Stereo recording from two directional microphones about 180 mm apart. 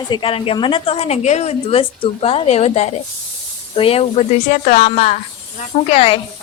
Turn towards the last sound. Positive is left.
turn(degrees=30)  # may be behind; listen again after turning